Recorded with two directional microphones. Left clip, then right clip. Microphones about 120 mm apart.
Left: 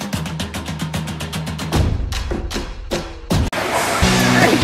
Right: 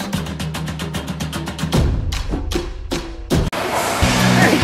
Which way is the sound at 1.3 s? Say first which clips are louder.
Right 1 dB; centre (ahead or behind).